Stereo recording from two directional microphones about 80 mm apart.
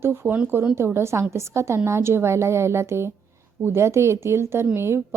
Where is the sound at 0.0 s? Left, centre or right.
Right.